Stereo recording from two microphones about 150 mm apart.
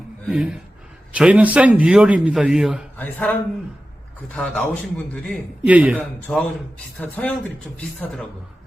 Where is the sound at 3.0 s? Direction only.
10° left (ahead or behind).